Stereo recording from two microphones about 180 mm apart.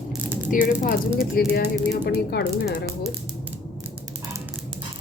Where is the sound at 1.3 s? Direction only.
60° left (ahead or behind).